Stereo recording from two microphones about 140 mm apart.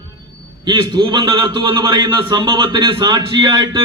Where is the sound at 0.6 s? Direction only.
30° right (ahead or behind).